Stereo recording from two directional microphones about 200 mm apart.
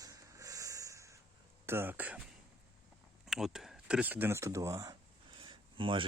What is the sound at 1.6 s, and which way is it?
Speech, 10° right (ahead or behind).